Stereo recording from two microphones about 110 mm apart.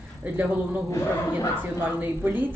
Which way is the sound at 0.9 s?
30° left (ahead or behind).